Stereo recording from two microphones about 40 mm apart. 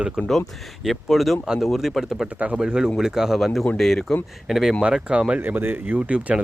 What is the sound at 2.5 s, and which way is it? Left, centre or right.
Speech, centre.